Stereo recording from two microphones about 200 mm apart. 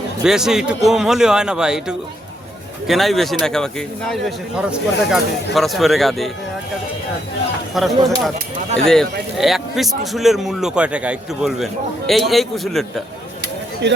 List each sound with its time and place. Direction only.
0.2 s a man's voice: 5° right (ahead or behind)
7.7 s a man's voice: centre (ahead or behind)
13.8 s a man's voice: 60° right (ahead or behind)